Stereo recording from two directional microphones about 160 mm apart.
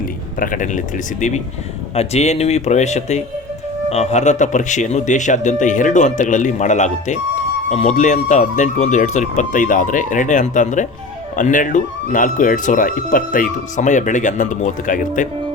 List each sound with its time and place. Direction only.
0.3 s a man's voice: 55° left (ahead or behind)